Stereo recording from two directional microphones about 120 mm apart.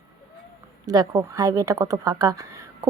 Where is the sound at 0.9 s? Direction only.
30° right (ahead or behind).